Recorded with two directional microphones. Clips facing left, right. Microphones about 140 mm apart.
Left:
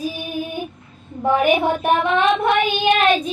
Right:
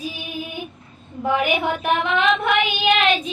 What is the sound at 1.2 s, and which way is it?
Child singing, 40° left (ahead or behind).